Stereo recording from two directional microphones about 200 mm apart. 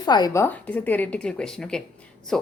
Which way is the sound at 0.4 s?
10° left (ahead or behind).